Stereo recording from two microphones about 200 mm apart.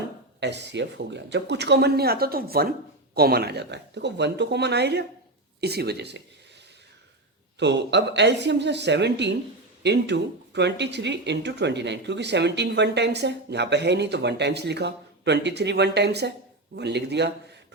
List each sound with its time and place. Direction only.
0.3 s speech: 60° right (ahead or behind)
7.6 s speech: 60° right (ahead or behind)